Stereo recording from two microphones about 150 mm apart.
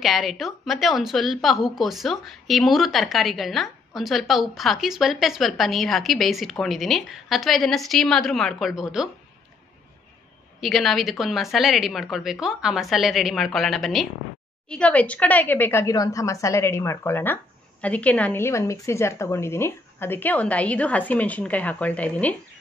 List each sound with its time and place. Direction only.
0.0 s a woman's voice: centre (ahead or behind)
10.6 s a woman's voice: centre (ahead or behind)